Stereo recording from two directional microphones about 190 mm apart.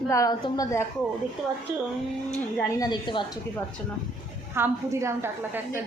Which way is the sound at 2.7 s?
20° left (ahead or behind).